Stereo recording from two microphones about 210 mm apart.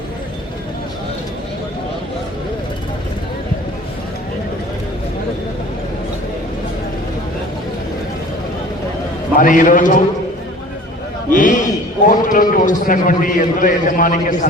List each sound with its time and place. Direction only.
9.4 s a man's voice: 40° left (ahead or behind)
11.3 s a man's voice: 40° left (ahead or behind)